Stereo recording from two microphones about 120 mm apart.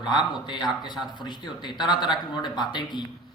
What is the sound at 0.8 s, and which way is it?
A man's voice, 40° left (ahead or behind).